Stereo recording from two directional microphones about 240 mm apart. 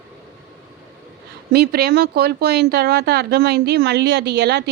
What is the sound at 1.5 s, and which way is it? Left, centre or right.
Speech, right.